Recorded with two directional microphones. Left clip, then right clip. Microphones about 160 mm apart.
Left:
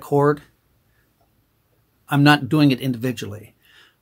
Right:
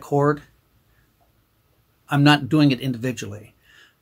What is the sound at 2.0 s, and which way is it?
Speech, 35° left (ahead or behind).